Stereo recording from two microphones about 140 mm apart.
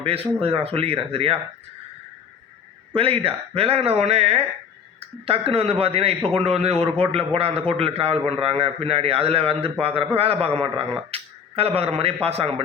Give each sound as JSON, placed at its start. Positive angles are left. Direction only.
{"t": 0.0, "sound": "a man's voice", "side_deg": -45}
{"t": 2.9, "sound": "a man's voice", "side_deg": -40}